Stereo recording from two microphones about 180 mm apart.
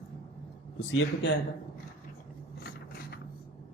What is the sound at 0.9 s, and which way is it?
Speech, 80° left.